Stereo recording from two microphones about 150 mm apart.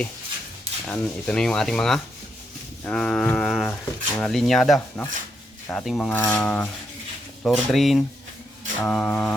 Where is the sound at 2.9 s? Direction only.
5° left (ahead or behind).